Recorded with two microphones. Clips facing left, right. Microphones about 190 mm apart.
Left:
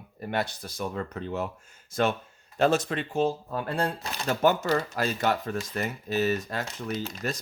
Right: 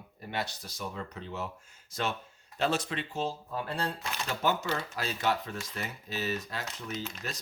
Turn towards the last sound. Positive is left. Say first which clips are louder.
# left 7 dB
turn(degrees=50)  # may be behind; listen again after turning